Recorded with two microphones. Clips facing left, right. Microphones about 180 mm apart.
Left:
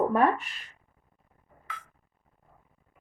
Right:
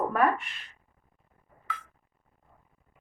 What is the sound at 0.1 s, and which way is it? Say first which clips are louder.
Speech: left 2 dB; 30° left (ahead or behind).